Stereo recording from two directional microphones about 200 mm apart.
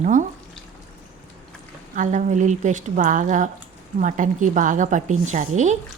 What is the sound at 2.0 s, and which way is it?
A woman's voice, 40° right (ahead or behind).